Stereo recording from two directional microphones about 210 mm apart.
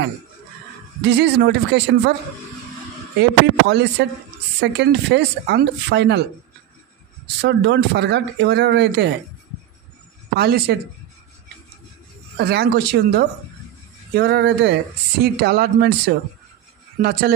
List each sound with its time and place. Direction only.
1.0 s speech: 55° right (ahead or behind)
3.2 s speech: 55° right (ahead or behind)
7.4 s speech: 50° right (ahead or behind)
10.3 s speech: 50° right (ahead or behind)
12.4 s speech: 50° right (ahead or behind)